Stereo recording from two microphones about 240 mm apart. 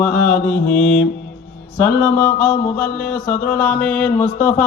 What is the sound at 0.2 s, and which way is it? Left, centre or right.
Speech, left.